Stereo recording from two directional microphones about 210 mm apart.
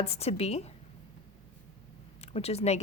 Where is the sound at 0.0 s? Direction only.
30° left (ahead or behind).